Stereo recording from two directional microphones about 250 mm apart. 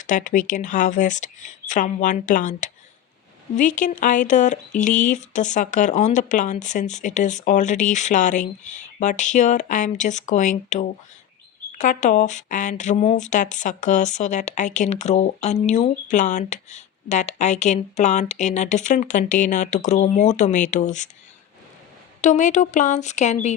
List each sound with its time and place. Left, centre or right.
0.0 s speech: left
22.2 s speech: left